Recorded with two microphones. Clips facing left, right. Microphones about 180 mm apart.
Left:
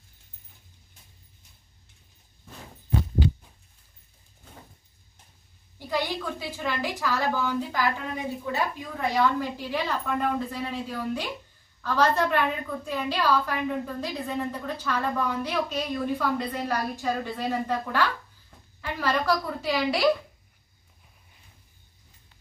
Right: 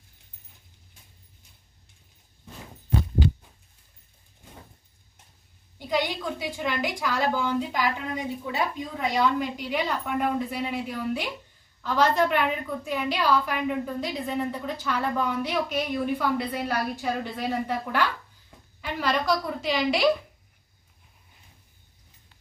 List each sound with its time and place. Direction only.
5.8 s a woman's voice: 15° right (ahead or behind)
19.1 s a woman's voice: 20° right (ahead or behind)